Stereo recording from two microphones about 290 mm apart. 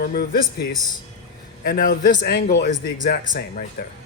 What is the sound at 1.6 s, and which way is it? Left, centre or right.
Speech, left.